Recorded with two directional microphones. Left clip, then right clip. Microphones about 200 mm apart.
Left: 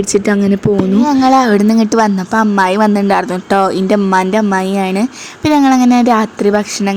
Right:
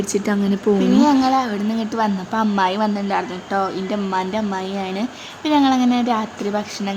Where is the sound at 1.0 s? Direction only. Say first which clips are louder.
Left 9 dB; 40° left (ahead or behind).